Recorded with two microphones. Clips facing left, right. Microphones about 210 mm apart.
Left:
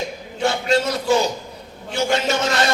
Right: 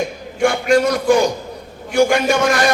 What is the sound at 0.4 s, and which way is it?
A man's voice, 25° left (ahead or behind).